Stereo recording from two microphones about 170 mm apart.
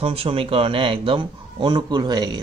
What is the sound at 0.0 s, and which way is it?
Speech, 35° right (ahead or behind).